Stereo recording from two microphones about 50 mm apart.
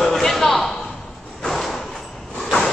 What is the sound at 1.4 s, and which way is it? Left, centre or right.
Thump, centre.